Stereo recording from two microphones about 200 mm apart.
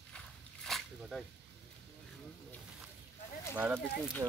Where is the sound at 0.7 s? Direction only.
Centre (ahead or behind).